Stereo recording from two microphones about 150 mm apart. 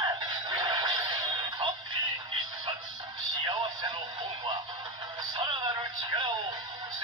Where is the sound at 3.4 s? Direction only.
30° right (ahead or behind).